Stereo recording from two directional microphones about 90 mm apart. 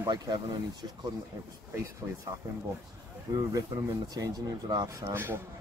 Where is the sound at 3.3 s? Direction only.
45° right (ahead or behind); by 5.4 s 25° right (ahead or behind).